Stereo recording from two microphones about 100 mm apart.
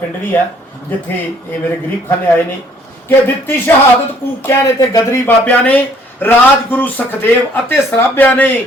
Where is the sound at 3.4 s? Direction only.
25° left (ahead or behind).